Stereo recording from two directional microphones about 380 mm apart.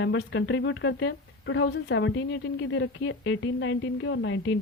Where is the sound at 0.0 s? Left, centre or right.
Left.